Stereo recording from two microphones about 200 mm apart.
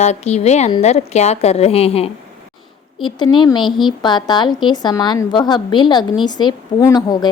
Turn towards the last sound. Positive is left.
turn(degrees=20)  # may be behind; listen again after turning